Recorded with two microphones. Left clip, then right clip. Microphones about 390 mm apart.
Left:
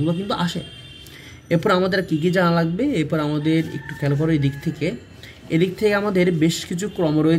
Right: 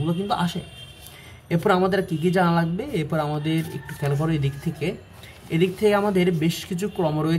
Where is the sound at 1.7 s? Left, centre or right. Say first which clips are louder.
Even; right.